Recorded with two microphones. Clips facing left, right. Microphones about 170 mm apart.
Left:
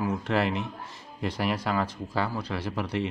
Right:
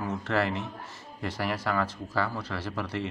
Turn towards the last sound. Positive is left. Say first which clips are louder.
# left 3 dB
turn(degrees=15)  # may be behind; listen again after turning